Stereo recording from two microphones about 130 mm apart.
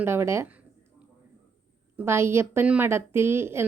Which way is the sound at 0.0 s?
20° right (ahead or behind).